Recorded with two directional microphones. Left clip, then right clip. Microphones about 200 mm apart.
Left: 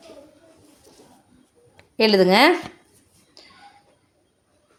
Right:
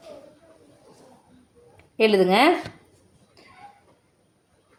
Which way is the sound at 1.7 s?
30° left (ahead or behind).